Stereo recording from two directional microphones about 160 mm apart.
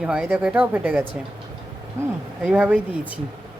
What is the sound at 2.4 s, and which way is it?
Speech, 5° right (ahead or behind).